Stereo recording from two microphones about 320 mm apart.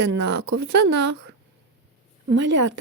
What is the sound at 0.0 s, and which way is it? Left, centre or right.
Speech, right.